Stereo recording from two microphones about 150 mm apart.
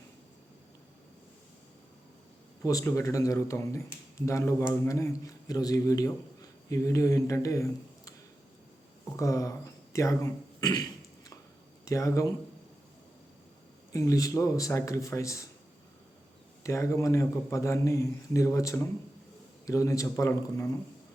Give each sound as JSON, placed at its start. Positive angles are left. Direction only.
{"t": 2.6, "sound": "a man's voice", "side_deg": 20}
{"t": 9.1, "sound": "speech", "side_deg": 20}
{"t": 10.6, "sound": "throat clearing", "side_deg": 25}
{"t": 11.9, "sound": "speech", "side_deg": 20}
{"t": 13.9, "sound": "speech", "side_deg": 20}
{"t": 16.6, "sound": "speech", "side_deg": 20}